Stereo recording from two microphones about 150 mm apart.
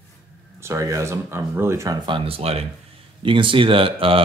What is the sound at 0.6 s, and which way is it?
Speech, 20° right (ahead or behind).